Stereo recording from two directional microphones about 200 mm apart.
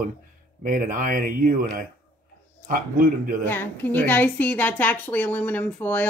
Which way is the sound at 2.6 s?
45° right (ahead or behind).